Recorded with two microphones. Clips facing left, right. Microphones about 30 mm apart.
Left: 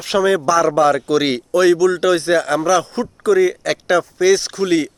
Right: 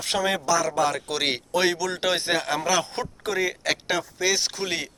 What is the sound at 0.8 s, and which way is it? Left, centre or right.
Speech, centre.